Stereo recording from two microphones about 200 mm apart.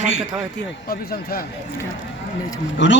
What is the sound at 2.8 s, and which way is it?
Speech, 65° left (ahead or behind).